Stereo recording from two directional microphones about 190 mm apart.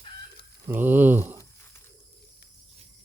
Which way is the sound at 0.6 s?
10° right (ahead or behind).